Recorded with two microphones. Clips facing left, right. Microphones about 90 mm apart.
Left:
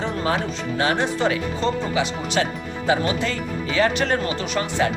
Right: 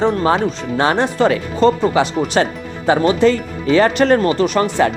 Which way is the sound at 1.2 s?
55° right (ahead or behind).